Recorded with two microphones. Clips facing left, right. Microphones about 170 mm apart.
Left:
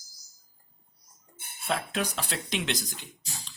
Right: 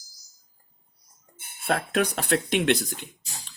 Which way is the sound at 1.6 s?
60° right (ahead or behind).